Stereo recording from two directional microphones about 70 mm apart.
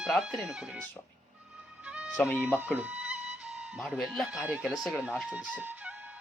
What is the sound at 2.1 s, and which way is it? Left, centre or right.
Speech, left.